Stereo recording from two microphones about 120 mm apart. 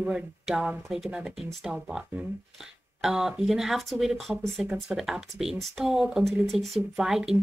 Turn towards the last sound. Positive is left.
turn(degrees=-5)  # may be behind; listen again after turning